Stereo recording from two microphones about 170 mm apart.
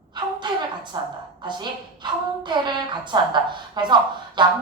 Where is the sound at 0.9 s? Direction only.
20° right (ahead or behind).